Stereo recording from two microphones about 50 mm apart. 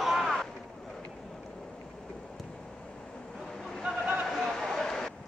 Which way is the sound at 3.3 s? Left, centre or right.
Centre.